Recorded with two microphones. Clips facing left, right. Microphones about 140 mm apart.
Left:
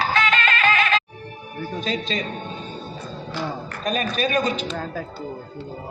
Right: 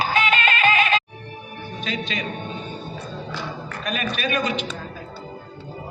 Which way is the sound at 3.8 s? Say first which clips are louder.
Left 3 dB; 35° left (ahead or behind).